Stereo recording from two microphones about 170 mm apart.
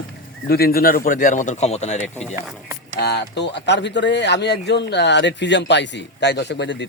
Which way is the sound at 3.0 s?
80° left.